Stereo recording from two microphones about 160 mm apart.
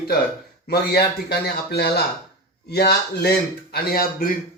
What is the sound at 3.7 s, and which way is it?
Speech, 70° left (ahead or behind).